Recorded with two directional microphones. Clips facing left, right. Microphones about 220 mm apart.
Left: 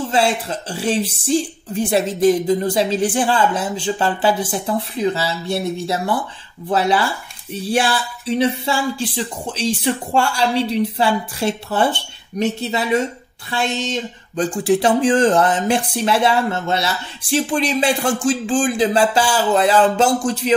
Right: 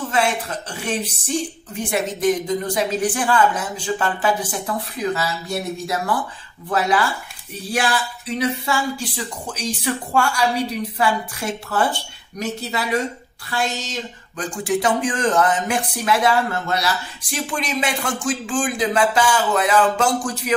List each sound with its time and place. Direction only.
0.1 s speech: 30° left (ahead or behind)